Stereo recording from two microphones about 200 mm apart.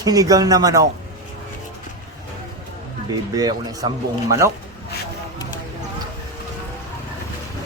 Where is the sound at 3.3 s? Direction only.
20° right (ahead or behind).